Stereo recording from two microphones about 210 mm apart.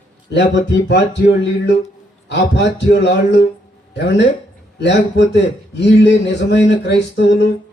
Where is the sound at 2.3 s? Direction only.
55° left (ahead or behind).